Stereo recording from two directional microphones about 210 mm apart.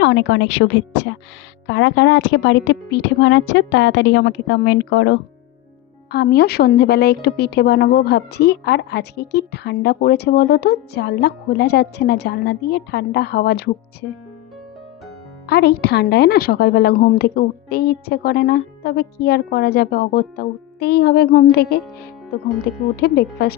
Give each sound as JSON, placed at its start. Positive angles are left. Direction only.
{"t": 0.0, "sound": "a woman's voice", "side_deg": 60}
{"t": 15.4, "sound": "a woman's voice", "side_deg": 50}
{"t": 23.0, "sound": "a woman's voice", "side_deg": 50}